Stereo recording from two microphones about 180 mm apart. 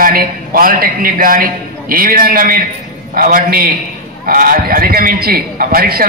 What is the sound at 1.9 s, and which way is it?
A man's voice, 50° right (ahead or behind).